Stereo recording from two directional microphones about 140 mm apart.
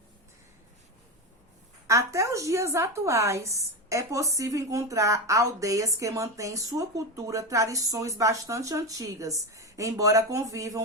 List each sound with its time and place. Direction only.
1.9 s a woman's voice: 20° right (ahead or behind)